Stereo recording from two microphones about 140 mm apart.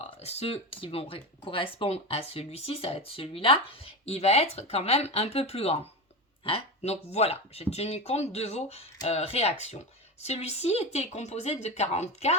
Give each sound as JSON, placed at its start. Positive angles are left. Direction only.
{"t": 0.0, "sound": "speech", "side_deg": 45}